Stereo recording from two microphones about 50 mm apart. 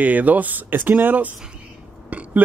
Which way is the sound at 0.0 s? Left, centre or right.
Right.